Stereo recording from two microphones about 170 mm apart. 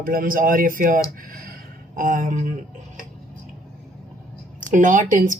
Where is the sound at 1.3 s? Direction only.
60° right (ahead or behind).